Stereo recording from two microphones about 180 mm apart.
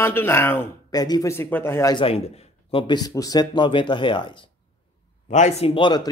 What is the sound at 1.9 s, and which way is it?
A man's voice, 30° left (ahead or behind).